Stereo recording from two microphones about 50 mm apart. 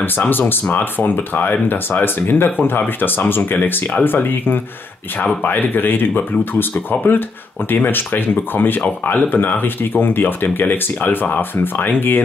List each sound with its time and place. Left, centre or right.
0.3 s speech: left
5.2 s speech: left